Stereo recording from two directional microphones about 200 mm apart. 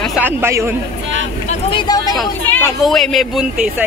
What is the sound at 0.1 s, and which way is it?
Speech, 10° right (ahead or behind).